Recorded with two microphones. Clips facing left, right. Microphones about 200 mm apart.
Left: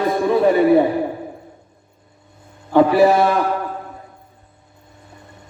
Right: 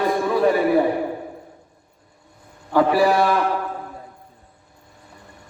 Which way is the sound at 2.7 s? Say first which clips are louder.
Left 4 dB; 25° left (ahead or behind).